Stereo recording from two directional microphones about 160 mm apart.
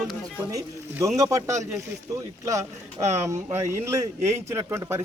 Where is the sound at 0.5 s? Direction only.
20° right (ahead or behind).